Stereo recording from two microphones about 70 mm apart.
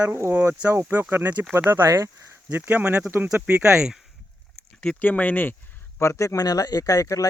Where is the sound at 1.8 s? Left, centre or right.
Right.